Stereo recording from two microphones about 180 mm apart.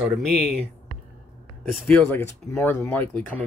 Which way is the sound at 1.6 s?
5° left (ahead or behind).